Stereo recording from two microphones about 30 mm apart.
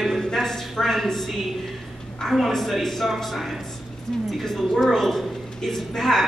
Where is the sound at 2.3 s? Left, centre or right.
Centre.